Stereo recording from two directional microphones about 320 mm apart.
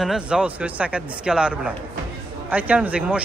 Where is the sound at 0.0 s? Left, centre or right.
Centre.